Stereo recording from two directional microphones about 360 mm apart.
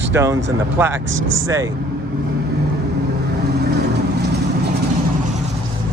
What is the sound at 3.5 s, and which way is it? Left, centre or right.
Vehicle, right.